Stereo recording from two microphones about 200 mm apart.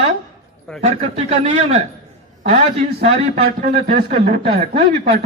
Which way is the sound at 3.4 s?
45° right (ahead or behind).